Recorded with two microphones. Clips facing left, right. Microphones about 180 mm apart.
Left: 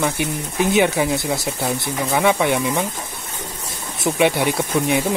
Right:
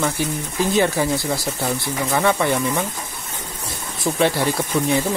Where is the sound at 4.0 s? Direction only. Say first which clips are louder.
Left 2 dB; 20° left (ahead or behind).